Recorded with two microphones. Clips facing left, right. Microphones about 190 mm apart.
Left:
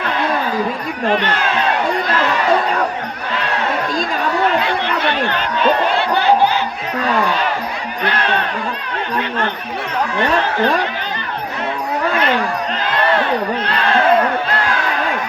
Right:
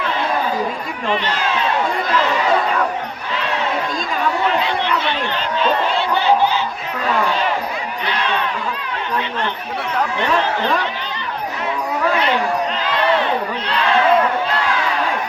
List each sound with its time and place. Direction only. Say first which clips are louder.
1.0 s speech: left 4 dB; 55° left (ahead or behind)
4.6 s a sound: left 1 dB; 55° left (ahead or behind)
8.0 s speech: left 4 dB; 55° left (ahead or behind)
10.2 s speech: left 4 dB; 55° left (ahead or behind)
13.7 s speech: left 1 dB; 55° left (ahead or behind)